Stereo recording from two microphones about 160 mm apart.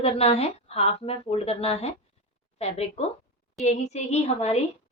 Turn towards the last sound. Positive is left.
turn(degrees=45)  # may be behind; listen again after turning